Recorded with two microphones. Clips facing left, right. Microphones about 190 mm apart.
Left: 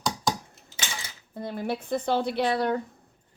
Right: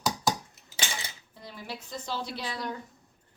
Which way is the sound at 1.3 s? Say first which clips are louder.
Left 12 dB; 55° left (ahead or behind).